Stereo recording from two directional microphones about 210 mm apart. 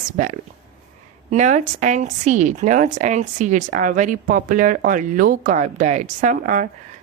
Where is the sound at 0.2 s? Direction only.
35° right (ahead or behind).